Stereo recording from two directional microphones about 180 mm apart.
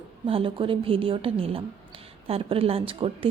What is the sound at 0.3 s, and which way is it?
A woman's voice, 30° right (ahead or behind).